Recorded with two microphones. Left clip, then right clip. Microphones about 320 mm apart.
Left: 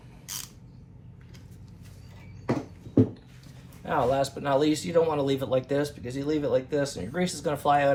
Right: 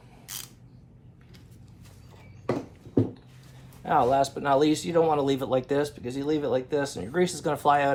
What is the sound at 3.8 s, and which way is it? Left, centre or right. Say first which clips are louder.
Speech: right 3 dB; right.